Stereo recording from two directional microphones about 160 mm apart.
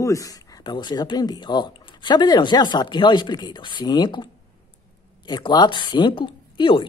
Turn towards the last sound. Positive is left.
turn(degrees=30)  # may be behind; listen again after turning